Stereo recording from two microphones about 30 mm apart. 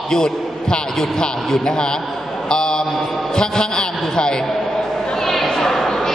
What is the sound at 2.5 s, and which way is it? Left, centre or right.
Mantra, left.